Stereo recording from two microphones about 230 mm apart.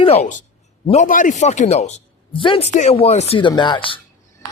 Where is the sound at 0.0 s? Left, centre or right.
Left.